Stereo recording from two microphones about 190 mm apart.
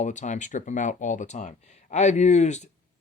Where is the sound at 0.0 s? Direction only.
40° left (ahead or behind).